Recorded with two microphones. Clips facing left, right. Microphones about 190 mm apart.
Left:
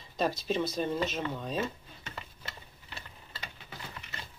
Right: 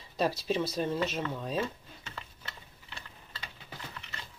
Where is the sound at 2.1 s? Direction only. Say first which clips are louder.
Left 2 dB; 10° left (ahead or behind).